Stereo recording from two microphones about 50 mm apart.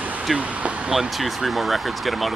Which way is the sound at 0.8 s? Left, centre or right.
Centre.